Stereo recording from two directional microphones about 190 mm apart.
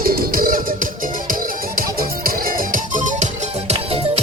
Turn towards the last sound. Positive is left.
turn(degrees=-45)  # may be behind; listen again after turning